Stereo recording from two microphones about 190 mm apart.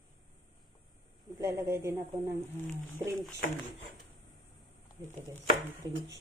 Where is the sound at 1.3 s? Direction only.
15° right (ahead or behind).